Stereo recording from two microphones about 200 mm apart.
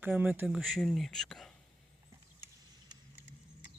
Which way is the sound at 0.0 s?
10° right (ahead or behind).